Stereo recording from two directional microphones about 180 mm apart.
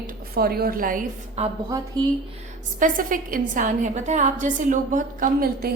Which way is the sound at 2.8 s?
50° right (ahead or behind).